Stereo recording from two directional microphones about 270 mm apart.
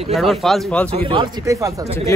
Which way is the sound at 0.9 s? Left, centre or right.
Centre.